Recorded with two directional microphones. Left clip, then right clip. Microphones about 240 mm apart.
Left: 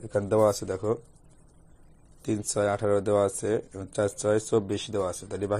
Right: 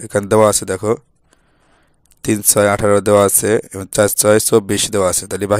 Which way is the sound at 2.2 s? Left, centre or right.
Right.